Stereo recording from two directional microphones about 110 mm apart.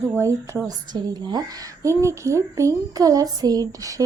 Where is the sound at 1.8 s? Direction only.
25° right (ahead or behind).